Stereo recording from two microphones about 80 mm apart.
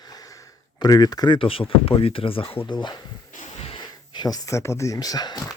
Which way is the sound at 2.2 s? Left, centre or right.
Left.